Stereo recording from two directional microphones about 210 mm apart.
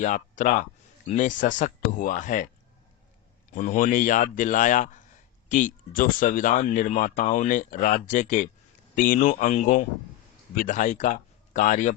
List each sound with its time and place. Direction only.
0.0 s speech: 35° left (ahead or behind)
3.5 s speech: 40° left (ahead or behind)